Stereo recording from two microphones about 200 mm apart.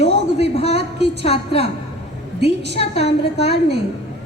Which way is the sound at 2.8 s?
30° left (ahead or behind).